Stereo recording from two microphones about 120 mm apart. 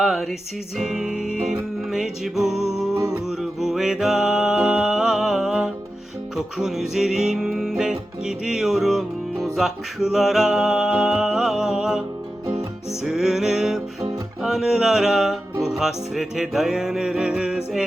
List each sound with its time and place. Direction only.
0.0 s music: centre (ahead or behind)
2.9 s music: 30° right (ahead or behind)
3.2 s music: centre (ahead or behind)